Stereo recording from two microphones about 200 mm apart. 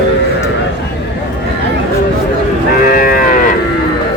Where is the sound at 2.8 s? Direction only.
45° left (ahead or behind).